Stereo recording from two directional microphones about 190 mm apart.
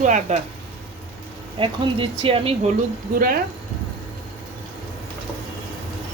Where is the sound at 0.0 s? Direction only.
40° right (ahead or behind).